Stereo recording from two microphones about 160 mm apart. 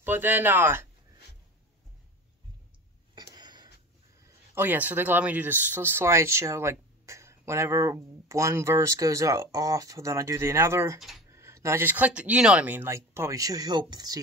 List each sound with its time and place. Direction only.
0.0 s speech: 10° right (ahead or behind)
3.3 s a sound: 25° right (ahead or behind)
4.6 s speech: 10° right (ahead or behind)
11.0 s speech: centre (ahead or behind)
11.2 s speech: 20° right (ahead or behind)